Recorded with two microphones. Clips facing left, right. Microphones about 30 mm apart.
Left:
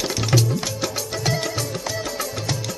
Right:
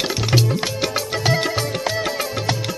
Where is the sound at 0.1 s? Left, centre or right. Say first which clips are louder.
Right 2 dB; right.